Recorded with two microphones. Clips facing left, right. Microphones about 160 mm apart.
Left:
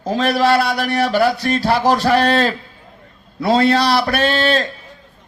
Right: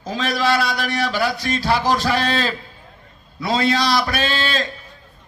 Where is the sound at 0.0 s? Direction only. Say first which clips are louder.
Left 6 dB; 55° left (ahead or behind).